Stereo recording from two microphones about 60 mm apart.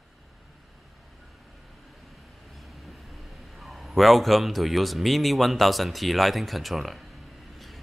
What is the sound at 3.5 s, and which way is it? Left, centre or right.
A man's voice, centre.